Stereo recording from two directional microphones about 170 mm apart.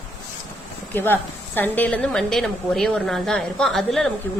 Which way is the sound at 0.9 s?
10° left (ahead or behind).